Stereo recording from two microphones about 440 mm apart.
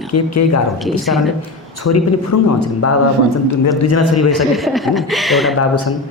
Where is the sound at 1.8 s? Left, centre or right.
Left.